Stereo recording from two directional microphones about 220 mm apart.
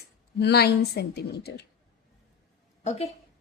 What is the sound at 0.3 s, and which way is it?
A woman's voice, 50° left (ahead or behind).